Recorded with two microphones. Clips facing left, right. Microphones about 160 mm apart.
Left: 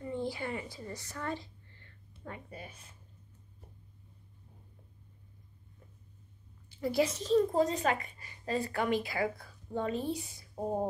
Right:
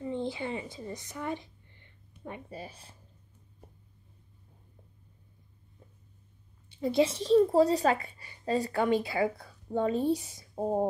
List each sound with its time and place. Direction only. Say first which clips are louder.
0.0 s a woman's voice: right 3 dB; 20° right (ahead or behind)
6.7 s speech: right 4 dB; 25° right (ahead or behind)